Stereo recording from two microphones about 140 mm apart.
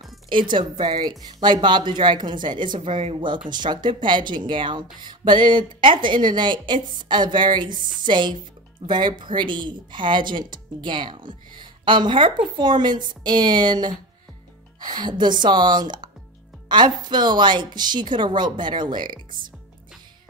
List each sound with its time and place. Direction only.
0.0 s a woman's voice: 35° right (ahead or behind)